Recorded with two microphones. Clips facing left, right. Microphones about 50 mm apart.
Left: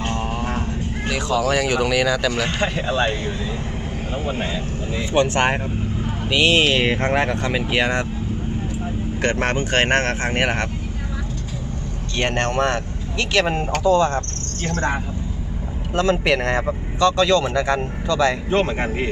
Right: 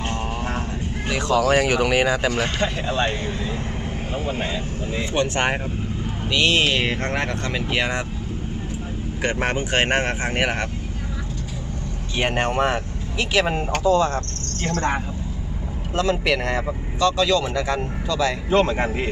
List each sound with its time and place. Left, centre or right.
1.3 s speech: right
2.6 s speech: left
4.4 s speech: centre
9.2 s speech: centre
12.1 s speech: centre
16.0 s speech: centre
18.5 s speech: left